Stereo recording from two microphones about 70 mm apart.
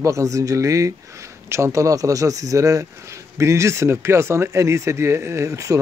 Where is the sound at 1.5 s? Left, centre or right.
Right.